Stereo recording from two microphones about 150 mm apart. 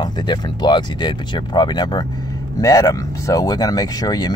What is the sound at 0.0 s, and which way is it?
Speech, 30° left (ahead or behind).